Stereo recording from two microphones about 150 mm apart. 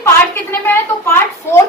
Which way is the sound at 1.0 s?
15° left (ahead or behind).